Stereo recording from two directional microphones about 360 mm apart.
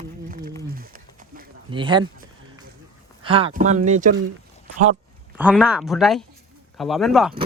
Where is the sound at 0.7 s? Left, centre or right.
Right.